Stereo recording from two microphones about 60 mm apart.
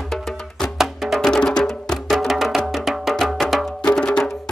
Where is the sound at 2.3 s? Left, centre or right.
Centre.